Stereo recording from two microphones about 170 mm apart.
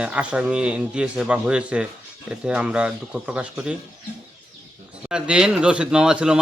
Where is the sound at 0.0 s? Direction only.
5° right (ahead or behind).